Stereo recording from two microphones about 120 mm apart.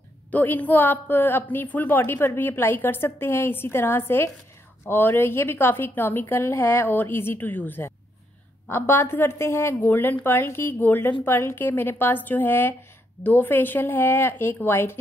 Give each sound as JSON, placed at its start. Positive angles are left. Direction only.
{"t": 0.3, "sound": "a woman's voice", "side_deg": 15}